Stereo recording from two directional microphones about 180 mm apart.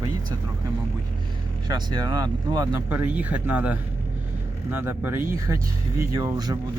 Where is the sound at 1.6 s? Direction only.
20° right (ahead or behind).